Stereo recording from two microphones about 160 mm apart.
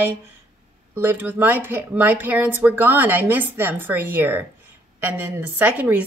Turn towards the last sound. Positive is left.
turn(degrees=-10)  # may be behind; listen again after turning